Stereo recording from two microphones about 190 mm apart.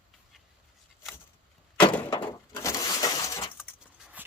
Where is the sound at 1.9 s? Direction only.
10° left (ahead or behind).